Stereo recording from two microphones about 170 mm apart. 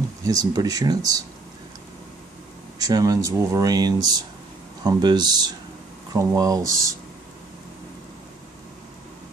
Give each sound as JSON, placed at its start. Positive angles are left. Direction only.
{"t": 0.2, "sound": "speech", "side_deg": -20}
{"t": 2.8, "sound": "speech", "side_deg": -20}